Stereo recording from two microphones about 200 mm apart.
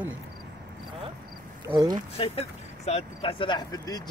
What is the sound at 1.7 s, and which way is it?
Speech, 20° right (ahead or behind).